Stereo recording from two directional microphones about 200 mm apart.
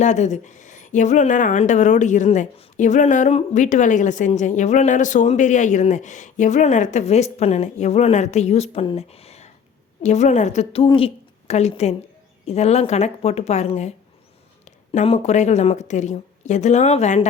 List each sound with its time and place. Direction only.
0.0 s speech: 35° left (ahead or behind)
14.9 s speech: 30° left (ahead or behind)